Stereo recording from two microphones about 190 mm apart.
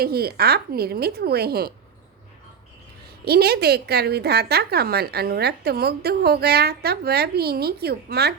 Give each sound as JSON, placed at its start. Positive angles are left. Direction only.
{"t": 0.0, "sound": "a woman's voice", "side_deg": -55}
{"t": 3.2, "sound": "a woman's voice", "side_deg": -55}